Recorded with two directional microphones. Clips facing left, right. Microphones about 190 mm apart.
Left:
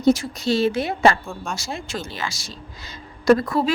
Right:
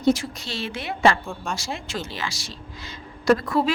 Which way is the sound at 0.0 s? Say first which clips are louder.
Left 3 dB; 40° left (ahead or behind).